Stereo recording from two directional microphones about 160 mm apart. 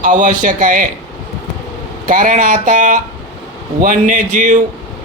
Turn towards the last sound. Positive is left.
turn(degrees=-50)  # may be behind; listen again after turning